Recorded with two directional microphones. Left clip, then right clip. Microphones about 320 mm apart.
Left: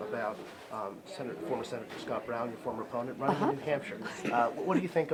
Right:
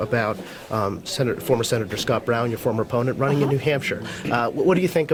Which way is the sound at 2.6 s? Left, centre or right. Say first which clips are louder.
Right 14 dB; right.